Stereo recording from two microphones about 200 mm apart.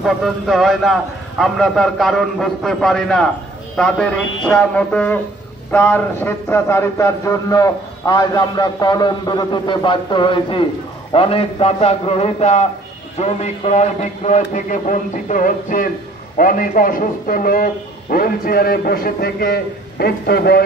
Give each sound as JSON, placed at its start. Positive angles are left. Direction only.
{"t": 0.0, "sound": "a man's voice", "side_deg": 0}
{"t": 4.5, "sound": "a sound", "side_deg": 5}
{"t": 5.7, "sound": "a man's voice", "side_deg": 5}